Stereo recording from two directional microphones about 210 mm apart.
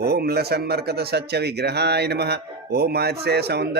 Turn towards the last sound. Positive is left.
turn(degrees=-50)  # may be behind; listen again after turning